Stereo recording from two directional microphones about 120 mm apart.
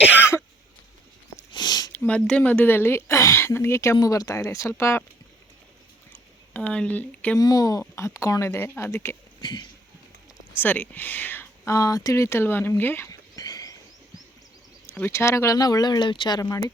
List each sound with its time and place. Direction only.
0.0 s cough: 15° right (ahead or behind)
1.5 s sniff: 35° left (ahead or behind)
1.9 s speech: 10° left (ahead or behind)
6.5 s speech: 10° left (ahead or behind)
7.3 s speech: 30° left (ahead or behind)
9.4 s speech: 40° left (ahead or behind)
10.6 s speech: 15° left (ahead or behind)
13.1 s a sound: 30° left (ahead or behind)
14.8 s speech: 15° left (ahead or behind); by 16.4 s 40° left (ahead or behind)
16.4 s speech: 30° left (ahead or behind)